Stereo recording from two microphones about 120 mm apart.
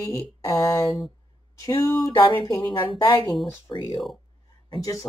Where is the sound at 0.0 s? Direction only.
30° left (ahead or behind).